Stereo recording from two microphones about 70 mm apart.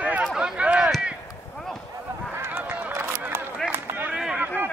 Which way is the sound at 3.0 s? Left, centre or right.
Right.